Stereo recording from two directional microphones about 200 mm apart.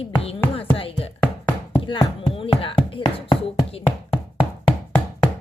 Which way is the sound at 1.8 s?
25° left (ahead or behind).